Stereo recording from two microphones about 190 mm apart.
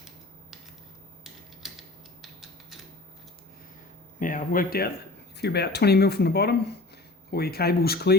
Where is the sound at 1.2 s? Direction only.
Centre (ahead or behind).